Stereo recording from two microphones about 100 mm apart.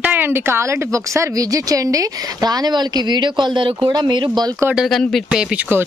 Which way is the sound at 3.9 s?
50° right (ahead or behind).